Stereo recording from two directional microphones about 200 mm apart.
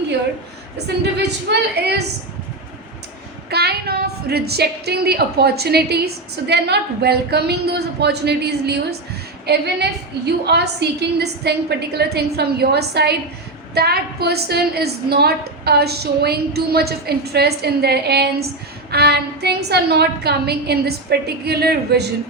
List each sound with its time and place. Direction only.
1.5 s a woman's voice: 60° right (ahead or behind)
3.5 s a woman's voice: 55° right (ahead or behind)